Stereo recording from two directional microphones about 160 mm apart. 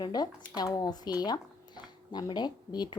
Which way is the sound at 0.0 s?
25° left (ahead or behind).